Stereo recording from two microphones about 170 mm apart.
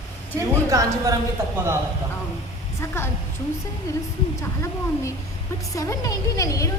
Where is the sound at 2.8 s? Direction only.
15° left (ahead or behind).